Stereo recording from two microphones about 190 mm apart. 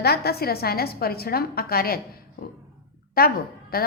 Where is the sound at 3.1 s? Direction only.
50° left (ahead or behind).